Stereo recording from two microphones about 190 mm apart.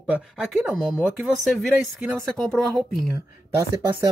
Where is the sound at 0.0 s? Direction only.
5° right (ahead or behind).